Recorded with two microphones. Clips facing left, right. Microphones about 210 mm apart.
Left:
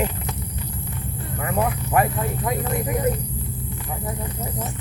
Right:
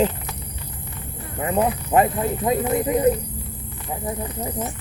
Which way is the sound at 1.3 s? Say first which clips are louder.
Right 3 dB; 20° right (ahead or behind).